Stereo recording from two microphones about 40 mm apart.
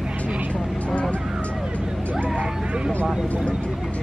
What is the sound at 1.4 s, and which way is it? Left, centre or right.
Music, left.